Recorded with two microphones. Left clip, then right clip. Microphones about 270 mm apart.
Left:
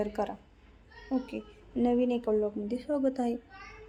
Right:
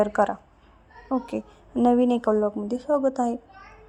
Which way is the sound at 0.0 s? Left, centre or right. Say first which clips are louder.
Right 11 dB; centre.